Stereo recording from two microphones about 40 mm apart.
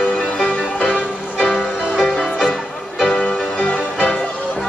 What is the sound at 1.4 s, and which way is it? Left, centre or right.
Music, centre.